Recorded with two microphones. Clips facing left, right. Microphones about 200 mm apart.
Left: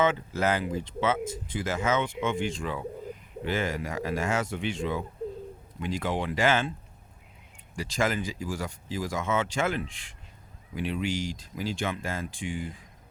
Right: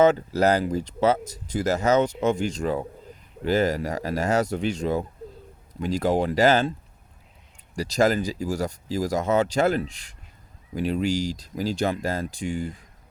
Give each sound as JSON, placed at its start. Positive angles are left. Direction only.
{"t": 0.0, "sound": "speech", "side_deg": -40}
{"t": 7.8, "sound": "speech", "side_deg": -40}